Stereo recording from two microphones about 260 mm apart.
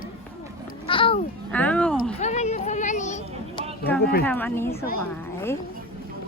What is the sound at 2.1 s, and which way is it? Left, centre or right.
Speech, left.